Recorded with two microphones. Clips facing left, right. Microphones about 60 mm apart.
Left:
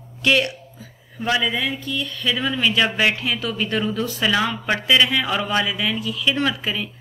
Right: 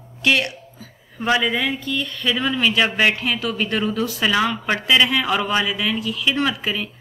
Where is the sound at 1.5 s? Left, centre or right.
Right.